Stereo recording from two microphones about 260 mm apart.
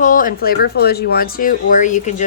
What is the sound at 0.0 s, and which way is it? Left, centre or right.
Speech, left.